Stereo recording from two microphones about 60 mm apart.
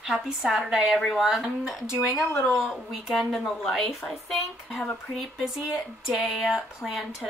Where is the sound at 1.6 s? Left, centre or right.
Centre.